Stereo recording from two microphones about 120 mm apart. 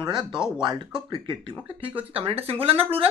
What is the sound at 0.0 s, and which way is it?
Speech, 40° right (ahead or behind).